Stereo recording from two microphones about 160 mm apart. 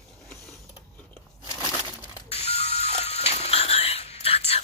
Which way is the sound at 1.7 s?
10° left (ahead or behind).